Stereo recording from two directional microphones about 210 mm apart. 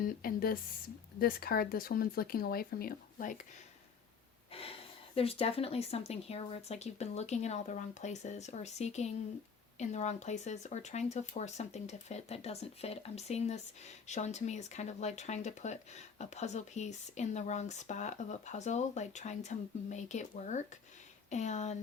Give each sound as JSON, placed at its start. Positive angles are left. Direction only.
{"t": 0.0, "sound": "speech", "side_deg": 45}
{"t": 4.5, "sound": "speech", "side_deg": 25}